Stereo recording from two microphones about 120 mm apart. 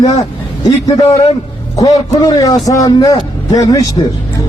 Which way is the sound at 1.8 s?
30° left (ahead or behind).